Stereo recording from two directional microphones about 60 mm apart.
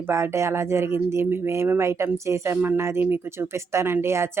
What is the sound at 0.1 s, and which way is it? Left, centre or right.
Speech, right.